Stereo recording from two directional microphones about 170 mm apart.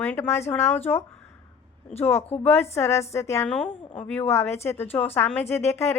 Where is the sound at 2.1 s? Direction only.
40° left (ahead or behind).